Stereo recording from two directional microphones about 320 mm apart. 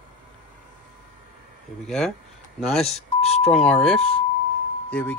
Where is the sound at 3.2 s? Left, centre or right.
Centre.